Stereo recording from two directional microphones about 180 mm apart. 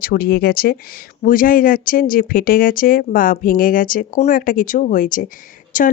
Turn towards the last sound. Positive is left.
turn(degrees=50)  # may be behind; listen again after turning